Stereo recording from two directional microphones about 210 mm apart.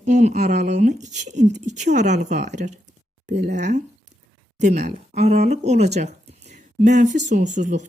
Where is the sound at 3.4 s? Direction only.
55° right (ahead or behind).